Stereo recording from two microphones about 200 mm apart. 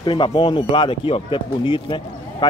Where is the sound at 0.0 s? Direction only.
20° left (ahead or behind).